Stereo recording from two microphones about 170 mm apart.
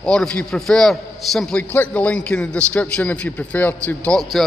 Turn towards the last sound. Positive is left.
turn(degrees=5)  # may be behind; listen again after turning